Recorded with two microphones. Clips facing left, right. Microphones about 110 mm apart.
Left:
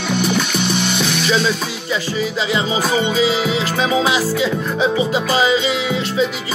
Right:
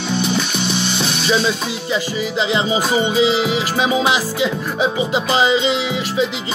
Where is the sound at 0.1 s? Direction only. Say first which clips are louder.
Left 2 dB; 55° left (ahead or behind).